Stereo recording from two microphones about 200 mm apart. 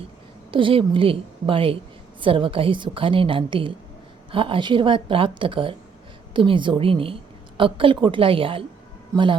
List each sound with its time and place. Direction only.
0.5 s a woman's voice: 25° right (ahead or behind)